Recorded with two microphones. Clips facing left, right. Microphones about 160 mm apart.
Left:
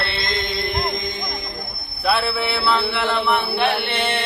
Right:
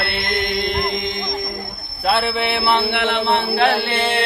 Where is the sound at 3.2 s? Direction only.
30° right (ahead or behind).